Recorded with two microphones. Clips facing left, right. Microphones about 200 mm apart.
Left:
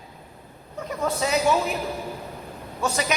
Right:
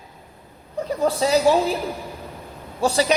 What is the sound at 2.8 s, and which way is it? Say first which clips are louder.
Speech: right 6 dB; 30° right (ahead or behind).